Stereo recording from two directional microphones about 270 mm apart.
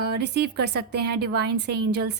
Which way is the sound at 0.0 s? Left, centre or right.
Right.